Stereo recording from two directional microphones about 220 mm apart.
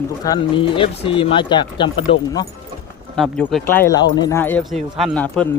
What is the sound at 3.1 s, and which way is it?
Speech, centre (ahead or behind).